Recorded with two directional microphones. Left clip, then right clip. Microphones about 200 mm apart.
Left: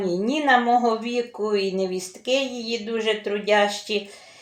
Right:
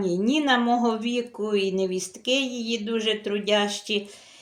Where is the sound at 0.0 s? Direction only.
60° right (ahead or behind).